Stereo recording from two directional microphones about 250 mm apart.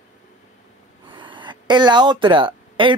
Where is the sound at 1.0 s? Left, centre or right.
Centre.